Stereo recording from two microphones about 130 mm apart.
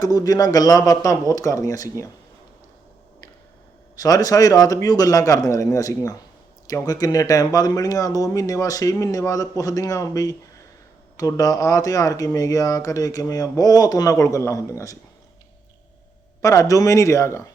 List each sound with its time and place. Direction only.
0.0 s speech: 30° left (ahead or behind)
3.9 s speech: 30° left (ahead or behind)
16.4 s speech: 25° left (ahead or behind)